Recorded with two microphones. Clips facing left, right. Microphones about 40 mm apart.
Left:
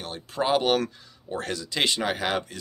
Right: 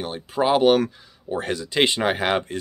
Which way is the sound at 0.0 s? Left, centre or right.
Centre.